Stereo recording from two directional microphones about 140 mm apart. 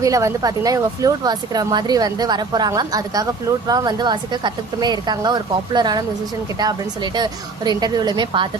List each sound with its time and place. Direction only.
0.0 s a woman's voice: 25° right (ahead or behind)
7.2 s a woman's voice: 30° right (ahead or behind)